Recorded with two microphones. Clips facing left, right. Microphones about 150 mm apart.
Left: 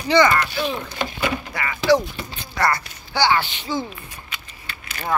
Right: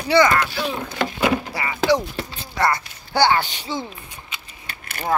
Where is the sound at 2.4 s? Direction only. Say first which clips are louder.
Even; 20° right (ahead or behind).